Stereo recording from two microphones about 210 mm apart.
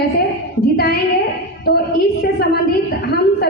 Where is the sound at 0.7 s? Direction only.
50° left (ahead or behind).